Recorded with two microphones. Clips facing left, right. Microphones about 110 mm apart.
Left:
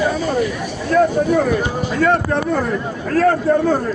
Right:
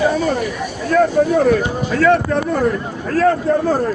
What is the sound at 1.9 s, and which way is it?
Speech, 90° right.